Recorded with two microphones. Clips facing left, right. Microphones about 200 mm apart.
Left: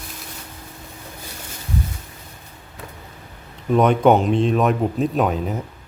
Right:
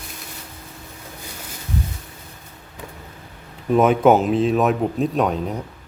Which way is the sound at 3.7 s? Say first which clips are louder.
Even; 5° right (ahead or behind).